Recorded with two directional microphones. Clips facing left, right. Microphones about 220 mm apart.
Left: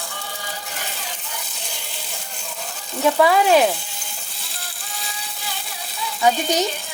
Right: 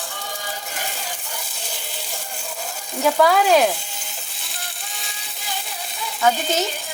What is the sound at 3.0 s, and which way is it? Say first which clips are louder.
Frying: left 1 dB; centre (ahead or behind).